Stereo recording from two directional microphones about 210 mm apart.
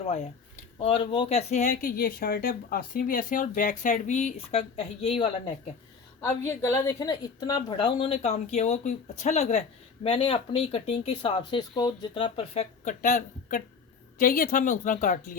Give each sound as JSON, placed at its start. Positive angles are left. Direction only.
{"t": 0.0, "sound": "speech", "side_deg": 35}
{"t": 6.2, "sound": "a woman's voice", "side_deg": 10}
{"t": 12.8, "sound": "speech", "side_deg": 40}